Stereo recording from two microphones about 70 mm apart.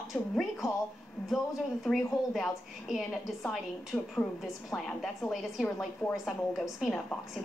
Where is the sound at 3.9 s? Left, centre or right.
Centre.